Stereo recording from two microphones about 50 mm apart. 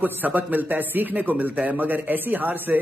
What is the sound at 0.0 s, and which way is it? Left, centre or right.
A man's voice, right.